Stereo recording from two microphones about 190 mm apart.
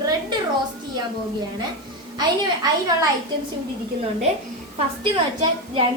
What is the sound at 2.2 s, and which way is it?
Speech, 20° right (ahead or behind).